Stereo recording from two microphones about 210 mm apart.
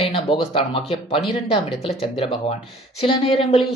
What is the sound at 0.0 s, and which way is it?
Speech, 25° left (ahead or behind).